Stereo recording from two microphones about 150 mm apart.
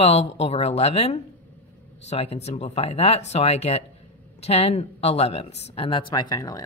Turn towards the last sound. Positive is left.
turn(degrees=25)  # may be behind; listen again after turning